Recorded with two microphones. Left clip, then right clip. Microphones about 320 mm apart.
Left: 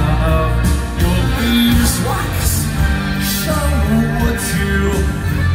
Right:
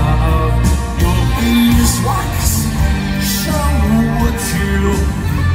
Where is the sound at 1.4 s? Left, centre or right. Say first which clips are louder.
Right 1 dB; right.